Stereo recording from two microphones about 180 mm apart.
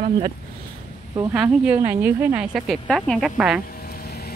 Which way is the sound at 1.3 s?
5° right (ahead or behind).